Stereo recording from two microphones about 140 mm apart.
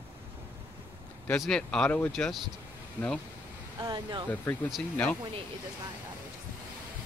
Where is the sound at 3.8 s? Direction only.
30° right (ahead or behind).